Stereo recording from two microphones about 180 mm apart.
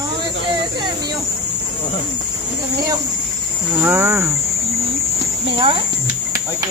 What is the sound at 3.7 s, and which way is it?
Speech, 15° right (ahead or behind).